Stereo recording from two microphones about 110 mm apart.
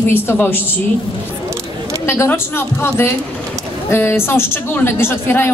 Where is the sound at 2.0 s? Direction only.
20° left (ahead or behind).